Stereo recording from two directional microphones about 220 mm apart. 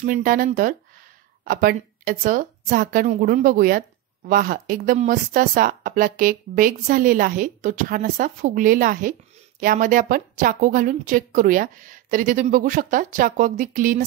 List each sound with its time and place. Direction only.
0.0 s speech: 40° right (ahead or behind)